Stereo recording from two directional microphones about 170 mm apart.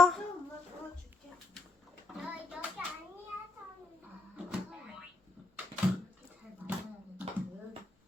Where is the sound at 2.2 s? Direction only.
5° right (ahead or behind).